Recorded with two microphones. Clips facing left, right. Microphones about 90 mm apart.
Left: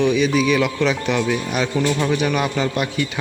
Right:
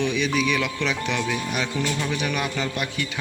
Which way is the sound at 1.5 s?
25° left (ahead or behind).